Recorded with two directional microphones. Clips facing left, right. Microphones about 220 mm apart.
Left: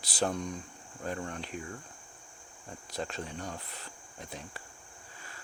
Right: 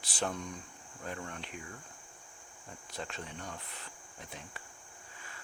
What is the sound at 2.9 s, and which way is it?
Speech, 40° left (ahead or behind).